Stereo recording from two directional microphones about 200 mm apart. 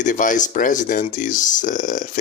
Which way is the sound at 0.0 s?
40° left (ahead or behind).